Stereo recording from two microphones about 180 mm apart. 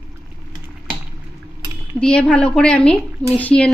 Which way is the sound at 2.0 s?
5° left (ahead or behind).